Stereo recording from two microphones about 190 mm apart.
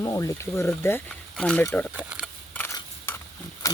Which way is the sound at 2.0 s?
5° right (ahead or behind).